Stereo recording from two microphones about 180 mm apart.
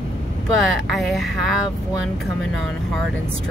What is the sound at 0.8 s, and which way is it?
Speech, centre (ahead or behind).